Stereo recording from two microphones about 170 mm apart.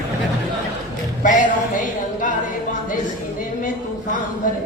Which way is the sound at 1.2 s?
50° left (ahead or behind).